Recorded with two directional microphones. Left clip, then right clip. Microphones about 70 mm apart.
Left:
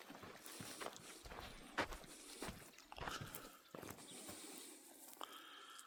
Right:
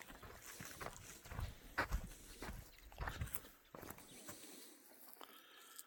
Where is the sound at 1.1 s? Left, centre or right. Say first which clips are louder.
Left 1 dB; centre.